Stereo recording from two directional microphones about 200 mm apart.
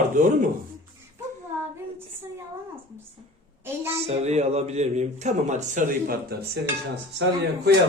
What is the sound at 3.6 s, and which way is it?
Speech, 10° right (ahead or behind).